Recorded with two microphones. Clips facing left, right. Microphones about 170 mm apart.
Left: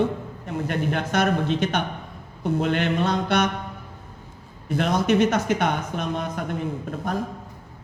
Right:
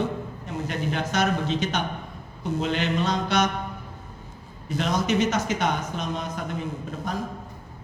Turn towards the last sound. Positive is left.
turn(degrees=55)  # may be behind; listen again after turning